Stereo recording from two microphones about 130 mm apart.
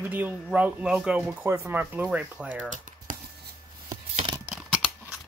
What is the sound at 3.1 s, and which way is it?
Writing, 90° right.